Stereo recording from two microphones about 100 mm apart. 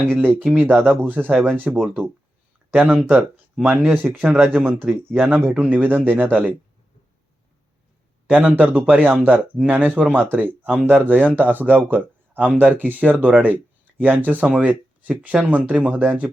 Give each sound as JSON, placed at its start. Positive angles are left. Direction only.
{"t": 0.1, "sound": "speech", "side_deg": -20}
{"t": 3.9, "sound": "speech", "side_deg": -15}
{"t": 8.3, "sound": "speech", "side_deg": -15}